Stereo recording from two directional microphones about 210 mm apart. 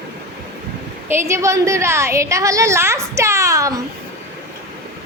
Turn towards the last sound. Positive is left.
turn(degrees=-15)  # may be behind; listen again after turning